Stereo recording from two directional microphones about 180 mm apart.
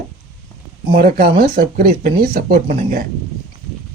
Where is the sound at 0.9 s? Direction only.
55° right (ahead or behind).